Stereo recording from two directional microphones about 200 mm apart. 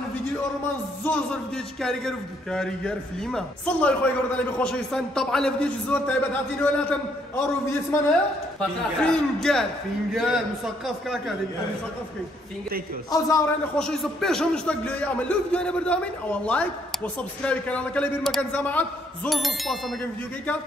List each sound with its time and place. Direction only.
1.0 s a man's voice: 5° left (ahead or behind)
13.1 s a man's voice: 15° left (ahead or behind)
13.7 s a man's voice: 5° left (ahead or behind)